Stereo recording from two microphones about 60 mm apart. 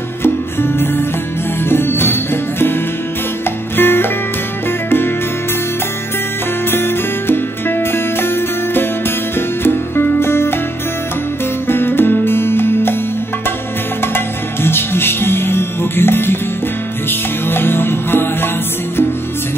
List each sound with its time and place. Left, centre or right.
0.2 s music: left
3.7 s music: left
6.7 s music: left
11.6 s music: left
14.0 s music: left